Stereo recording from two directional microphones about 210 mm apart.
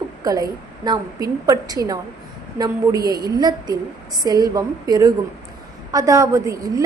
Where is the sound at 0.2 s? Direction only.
15° right (ahead or behind).